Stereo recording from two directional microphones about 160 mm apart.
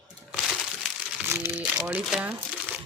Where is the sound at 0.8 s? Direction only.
10° right (ahead or behind).